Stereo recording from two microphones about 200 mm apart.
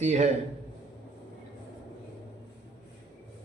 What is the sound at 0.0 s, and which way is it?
Speech, 35° right (ahead or behind).